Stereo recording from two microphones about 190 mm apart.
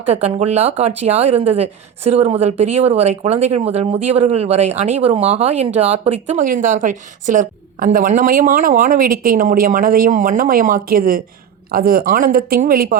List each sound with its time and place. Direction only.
0.1 s a woman's voice: 35° right (ahead or behind); by 13.0 s 50° right (ahead or behind)